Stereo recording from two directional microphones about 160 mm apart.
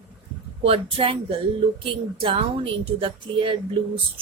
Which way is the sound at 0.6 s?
35° right (ahead or behind).